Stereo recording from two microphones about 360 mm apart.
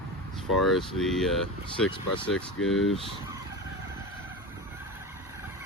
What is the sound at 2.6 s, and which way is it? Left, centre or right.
Speech, left.